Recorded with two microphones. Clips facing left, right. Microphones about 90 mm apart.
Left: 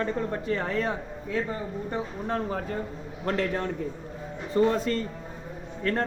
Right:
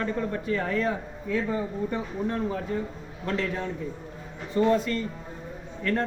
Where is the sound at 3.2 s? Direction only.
40° left (ahead or behind).